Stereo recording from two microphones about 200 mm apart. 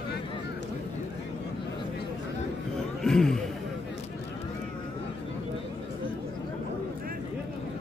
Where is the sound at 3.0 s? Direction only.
Centre (ahead or behind).